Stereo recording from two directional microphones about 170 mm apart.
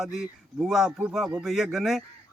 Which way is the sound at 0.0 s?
Centre (ahead or behind).